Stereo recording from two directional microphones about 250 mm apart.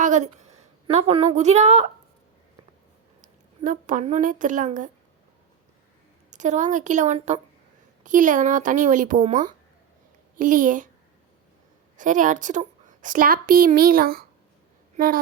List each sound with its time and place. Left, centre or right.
0.0 s a woman's voice: right
3.2 s speech: right
6.3 s a woman's voice: right
11.9 s a woman's voice: right